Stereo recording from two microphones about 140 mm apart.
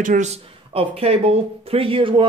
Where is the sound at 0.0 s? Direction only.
70° right (ahead or behind).